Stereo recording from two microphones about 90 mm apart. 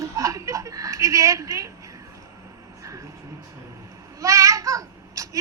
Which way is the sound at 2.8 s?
35° right (ahead or behind).